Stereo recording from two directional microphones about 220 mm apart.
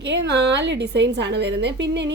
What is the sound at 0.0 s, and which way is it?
A woman's voice, 50° right (ahead or behind).